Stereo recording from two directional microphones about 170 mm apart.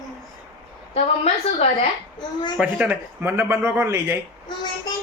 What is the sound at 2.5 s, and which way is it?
Speech, 10° right (ahead or behind).